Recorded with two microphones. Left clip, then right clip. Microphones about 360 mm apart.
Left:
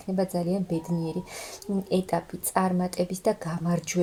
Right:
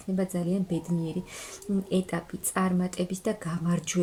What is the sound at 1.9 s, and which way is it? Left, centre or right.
Speech, centre.